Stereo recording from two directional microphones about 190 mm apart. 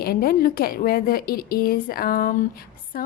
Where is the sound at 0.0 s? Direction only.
50° left (ahead or behind).